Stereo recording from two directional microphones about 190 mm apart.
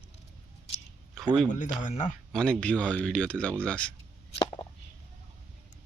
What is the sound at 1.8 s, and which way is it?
Speech, 40° left (ahead or behind).